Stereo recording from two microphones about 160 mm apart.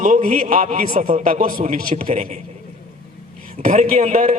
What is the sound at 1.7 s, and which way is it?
Speech, 50° right (ahead or behind).